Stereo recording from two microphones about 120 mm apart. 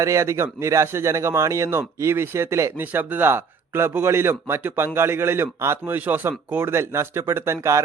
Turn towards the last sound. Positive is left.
turn(degrees=-25)  # may be behind; listen again after turning